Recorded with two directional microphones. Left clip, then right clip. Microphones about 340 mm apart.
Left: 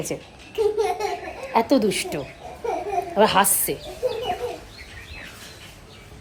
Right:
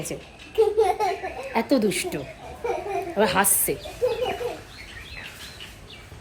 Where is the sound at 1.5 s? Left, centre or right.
Centre.